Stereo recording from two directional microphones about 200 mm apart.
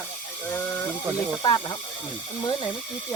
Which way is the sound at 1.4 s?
20° left (ahead or behind).